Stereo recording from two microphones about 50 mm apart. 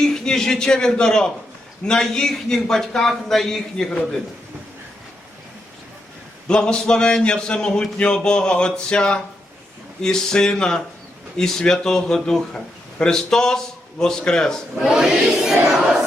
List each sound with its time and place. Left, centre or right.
0.0 s a man's voice: centre
6.5 s speech: centre
14.8 s a sound: centre